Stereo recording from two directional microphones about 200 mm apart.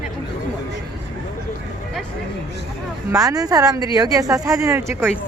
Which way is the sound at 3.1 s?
15° right (ahead or behind).